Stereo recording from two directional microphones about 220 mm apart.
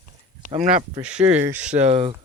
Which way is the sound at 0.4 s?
30° right (ahead or behind).